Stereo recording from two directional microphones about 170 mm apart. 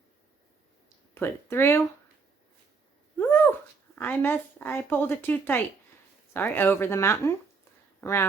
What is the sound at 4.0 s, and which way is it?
A woman's voice, 10° left (ahead or behind).